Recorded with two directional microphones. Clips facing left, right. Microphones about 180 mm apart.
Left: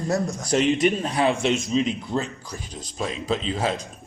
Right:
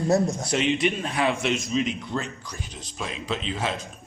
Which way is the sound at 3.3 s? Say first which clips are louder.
Left 4 dB; 35° left (ahead or behind).